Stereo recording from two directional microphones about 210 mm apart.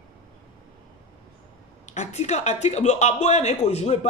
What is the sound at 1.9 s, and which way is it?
Speech, 35° left (ahead or behind).